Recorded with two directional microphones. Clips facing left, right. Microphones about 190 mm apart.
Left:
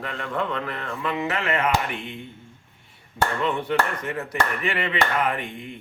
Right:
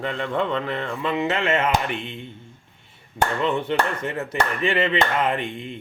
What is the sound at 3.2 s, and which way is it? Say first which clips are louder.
Speech: right 2 dB; 25° right (ahead or behind).